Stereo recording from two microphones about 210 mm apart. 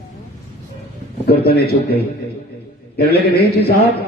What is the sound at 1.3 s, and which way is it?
Speech, 50° left (ahead or behind).